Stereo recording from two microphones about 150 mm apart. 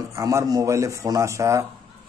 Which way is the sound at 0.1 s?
20° right (ahead or behind).